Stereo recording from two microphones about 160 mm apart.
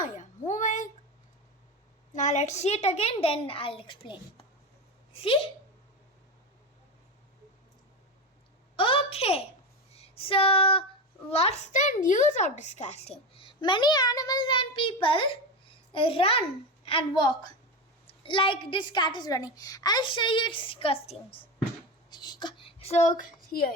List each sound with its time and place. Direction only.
0.0 s a sound: 50° left (ahead or behind)
2.1 s a woman's voice: 45° left (ahead or behind)
8.7 s a woman's voice: 35° left (ahead or behind)
10.0 s female singing: 35° left (ahead or behind)
11.3 s a woman's voice: 40° left (ahead or behind)
22.1 s a sound: 25° left (ahead or behind); by 23.6 s 55° left (ahead or behind)